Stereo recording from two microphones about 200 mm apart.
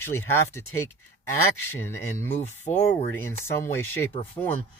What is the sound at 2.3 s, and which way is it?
Speech, 35° left (ahead or behind).